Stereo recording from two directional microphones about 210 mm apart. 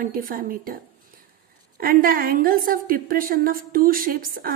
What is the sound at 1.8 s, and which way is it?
A woman's voice, 45° right (ahead or behind).